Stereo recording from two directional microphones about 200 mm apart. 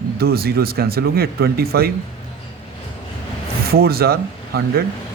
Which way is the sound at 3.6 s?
50° right (ahead or behind).